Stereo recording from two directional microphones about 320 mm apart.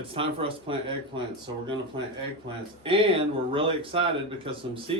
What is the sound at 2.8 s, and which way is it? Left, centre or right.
Speech, centre.